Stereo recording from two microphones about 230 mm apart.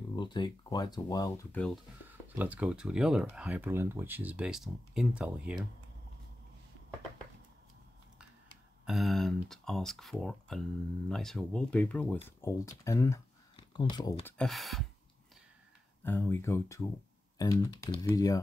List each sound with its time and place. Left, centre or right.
0.1 s speech: centre
2.0 s speech: centre
8.8 s speech: centre
14.2 s speech: centre
16.0 s speech: centre